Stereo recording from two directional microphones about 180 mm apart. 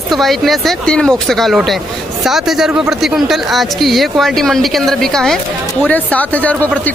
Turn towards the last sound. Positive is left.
turn(degrees=10)  # may be behind; listen again after turning